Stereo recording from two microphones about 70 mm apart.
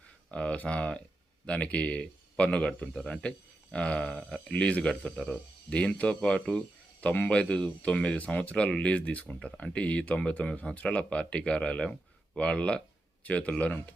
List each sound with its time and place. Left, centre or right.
0.3 s speech: centre
4.2 s speech: centre
4.5 s speech: centre
7.0 s speech: left